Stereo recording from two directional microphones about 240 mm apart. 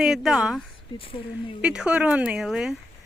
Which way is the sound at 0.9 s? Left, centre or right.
Left.